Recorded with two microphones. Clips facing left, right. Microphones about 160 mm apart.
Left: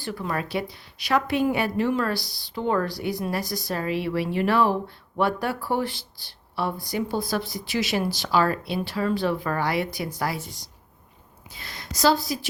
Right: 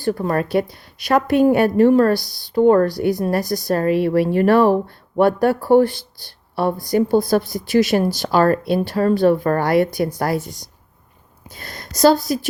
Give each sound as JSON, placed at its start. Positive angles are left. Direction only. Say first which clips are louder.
{"t": 0.0, "sound": "speech", "louder": "right 9 dB", "side_deg": -45}